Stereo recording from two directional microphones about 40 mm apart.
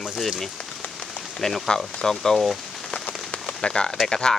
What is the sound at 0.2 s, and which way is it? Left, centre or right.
Speech, centre.